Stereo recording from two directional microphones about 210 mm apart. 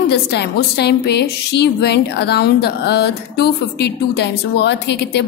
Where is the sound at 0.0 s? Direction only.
50° left (ahead or behind).